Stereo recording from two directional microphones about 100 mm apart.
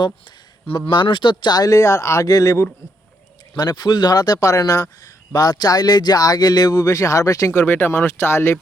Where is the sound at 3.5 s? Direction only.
45° left (ahead or behind).